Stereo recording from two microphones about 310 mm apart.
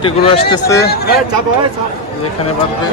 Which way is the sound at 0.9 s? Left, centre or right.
Left.